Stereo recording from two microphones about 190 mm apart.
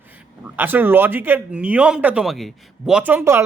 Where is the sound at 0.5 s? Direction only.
10° right (ahead or behind).